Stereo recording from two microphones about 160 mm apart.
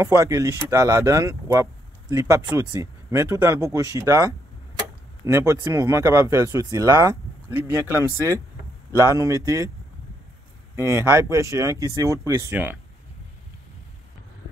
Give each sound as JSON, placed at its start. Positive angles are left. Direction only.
{"t": 0.0, "sound": "speech", "side_deg": -15}
{"t": 10.8, "sound": "speech", "side_deg": -15}